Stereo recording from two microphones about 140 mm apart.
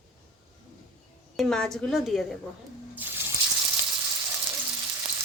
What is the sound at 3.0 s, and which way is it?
Water, 15° right (ahead or behind).